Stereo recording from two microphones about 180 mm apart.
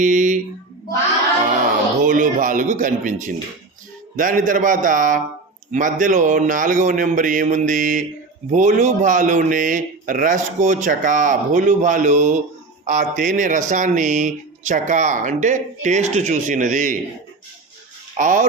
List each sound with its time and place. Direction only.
0.0 s speech: 45° right (ahead or behind)
2.0 s speech: 50° right (ahead or behind)
18.2 s speech: 45° right (ahead or behind)